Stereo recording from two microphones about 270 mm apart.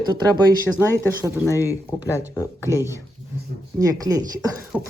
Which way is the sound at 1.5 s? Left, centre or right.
Centre.